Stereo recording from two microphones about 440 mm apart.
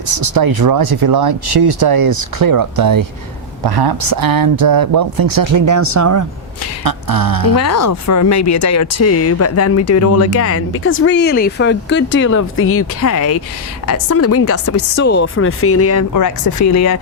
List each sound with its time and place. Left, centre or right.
0.1 s speech: right
6.8 s a sound: right
7.5 s speech: left